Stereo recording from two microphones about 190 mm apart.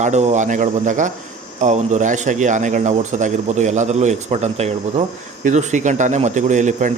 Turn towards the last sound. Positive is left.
turn(degrees=-40)  # may be behind; listen again after turning